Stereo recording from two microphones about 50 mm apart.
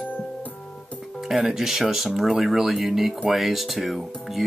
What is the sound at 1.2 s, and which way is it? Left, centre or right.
Speech, centre.